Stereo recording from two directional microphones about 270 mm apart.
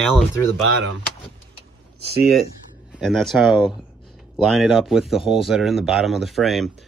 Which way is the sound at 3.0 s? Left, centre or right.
Centre.